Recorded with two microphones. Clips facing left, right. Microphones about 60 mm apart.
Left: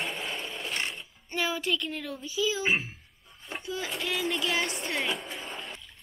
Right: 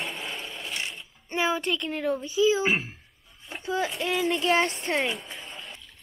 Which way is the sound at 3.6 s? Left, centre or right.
Right.